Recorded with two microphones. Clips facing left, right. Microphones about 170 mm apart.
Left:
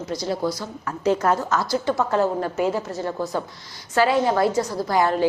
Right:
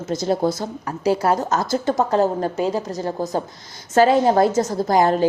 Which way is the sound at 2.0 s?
35° right (ahead or behind).